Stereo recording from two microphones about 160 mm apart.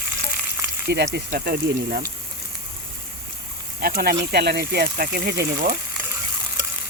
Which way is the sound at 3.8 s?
70° right (ahead or behind).